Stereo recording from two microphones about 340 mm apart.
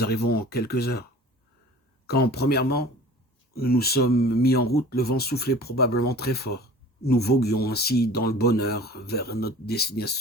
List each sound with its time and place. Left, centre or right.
0.0 s speech: left
2.0 s speech: left